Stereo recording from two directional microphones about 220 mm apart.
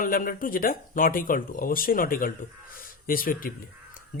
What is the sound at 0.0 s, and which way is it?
Speech, 40° left (ahead or behind).